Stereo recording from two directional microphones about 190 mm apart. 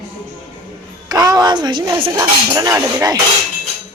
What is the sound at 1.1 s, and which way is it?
Speech, 20° right (ahead or behind).